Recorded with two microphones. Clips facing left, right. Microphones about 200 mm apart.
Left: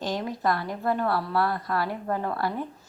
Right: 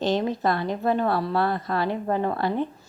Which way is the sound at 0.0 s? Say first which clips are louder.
Right 5 dB; 25° right (ahead or behind).